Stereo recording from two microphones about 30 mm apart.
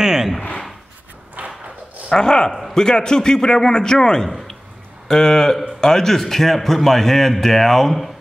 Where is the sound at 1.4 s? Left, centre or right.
Right.